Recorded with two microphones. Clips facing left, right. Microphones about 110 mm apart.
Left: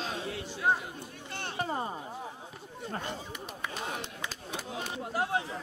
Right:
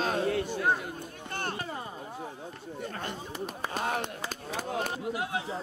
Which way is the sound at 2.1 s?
Centre (ahead or behind).